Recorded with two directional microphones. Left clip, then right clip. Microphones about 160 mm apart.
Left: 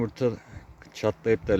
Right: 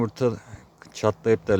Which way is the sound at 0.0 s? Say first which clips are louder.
Right 3 dB; 20° right (ahead or behind).